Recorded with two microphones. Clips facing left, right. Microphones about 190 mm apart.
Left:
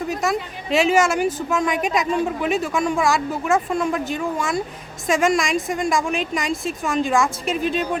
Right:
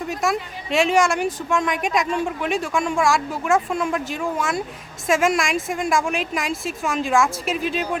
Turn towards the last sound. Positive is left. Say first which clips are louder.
# left 2 dB
turn(degrees=0)  # may be behind; listen again after turning